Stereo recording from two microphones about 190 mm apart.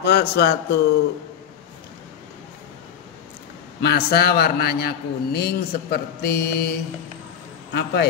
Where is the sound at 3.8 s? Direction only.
55° left (ahead or behind).